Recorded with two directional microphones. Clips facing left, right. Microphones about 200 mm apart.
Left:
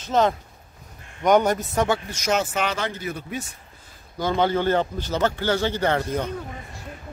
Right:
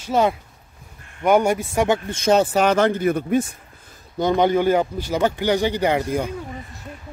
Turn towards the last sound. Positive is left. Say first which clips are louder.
# right 3 dB
turn(degrees=-10)  # may be behind; listen again after turning